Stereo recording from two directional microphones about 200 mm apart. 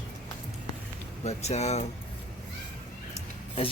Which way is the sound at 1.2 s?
35° left (ahead or behind).